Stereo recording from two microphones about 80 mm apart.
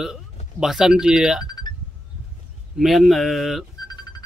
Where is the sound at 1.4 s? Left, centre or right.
Left.